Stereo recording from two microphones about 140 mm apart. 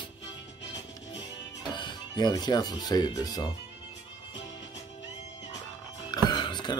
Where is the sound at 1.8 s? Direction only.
30° left (ahead or behind).